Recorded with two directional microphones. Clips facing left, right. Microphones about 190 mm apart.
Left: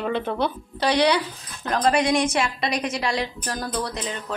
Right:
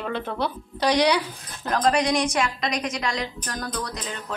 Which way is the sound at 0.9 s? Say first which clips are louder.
Left 2 dB; 10° right (ahead or behind).